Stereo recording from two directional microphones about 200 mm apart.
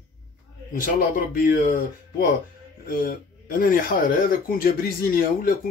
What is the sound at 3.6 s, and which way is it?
Speech, 45° left (ahead or behind).